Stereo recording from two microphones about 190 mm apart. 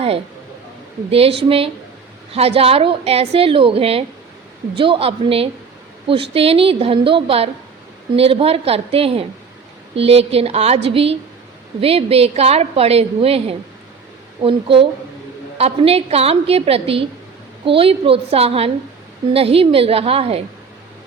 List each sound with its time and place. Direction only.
1.5 s a woman's voice: 30° right (ahead or behind)